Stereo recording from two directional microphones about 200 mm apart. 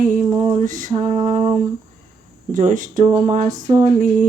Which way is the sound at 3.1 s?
20° right (ahead or behind).